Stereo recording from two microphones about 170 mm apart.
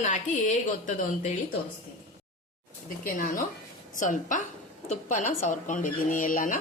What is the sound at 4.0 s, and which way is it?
A woman's voice, 50° left (ahead or behind).